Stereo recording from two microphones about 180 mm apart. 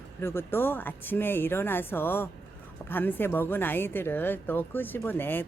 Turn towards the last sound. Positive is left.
turn(degrees=10)  # may be behind; listen again after turning